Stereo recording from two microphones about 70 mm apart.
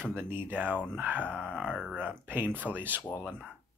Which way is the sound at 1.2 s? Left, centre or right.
Centre.